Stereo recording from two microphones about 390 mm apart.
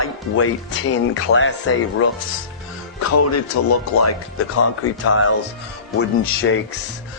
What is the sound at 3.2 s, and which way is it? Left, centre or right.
Speech, left.